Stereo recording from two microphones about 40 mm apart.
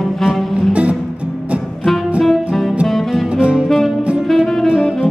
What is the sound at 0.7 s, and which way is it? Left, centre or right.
Music, right.